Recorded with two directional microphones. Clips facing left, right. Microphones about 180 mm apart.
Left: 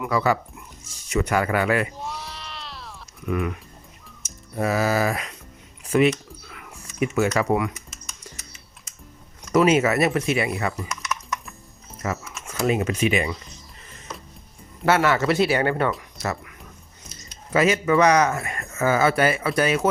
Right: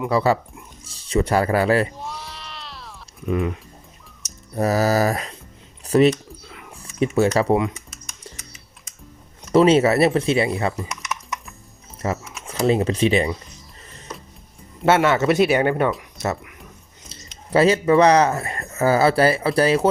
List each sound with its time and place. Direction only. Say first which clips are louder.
0.0 s speech: right 3 dB; 30° right (ahead or behind)
2.0 s sheep: even; centre (ahead or behind)
3.2 s speech: right 3 dB; 25° right (ahead or behind)
4.5 s speech: right 3 dB; 40° right (ahead or behind)
6.4 s a sound: right 2 dB; 20° right (ahead or behind)
6.7 s speech: right 3 dB; 30° right (ahead or behind)
9.5 s speech: right 4 dB; 30° right (ahead or behind)
12.0 s speech: right 3 dB; 30° right (ahead or behind)
14.8 s speech: right 3 dB; 25° right (ahead or behind)
16.1 s a sound: right 3 dB; 25° right (ahead or behind)
17.1 s speech: right 4 dB; 30° right (ahead or behind)